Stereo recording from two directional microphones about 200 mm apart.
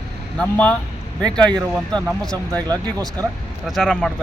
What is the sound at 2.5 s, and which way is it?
Speech, 20° right (ahead or behind).